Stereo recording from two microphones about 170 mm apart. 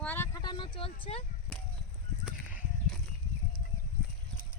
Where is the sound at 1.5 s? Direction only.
5° left (ahead or behind).